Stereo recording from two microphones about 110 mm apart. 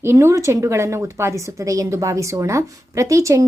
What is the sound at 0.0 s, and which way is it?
A woman's voice, 25° right (ahead or behind).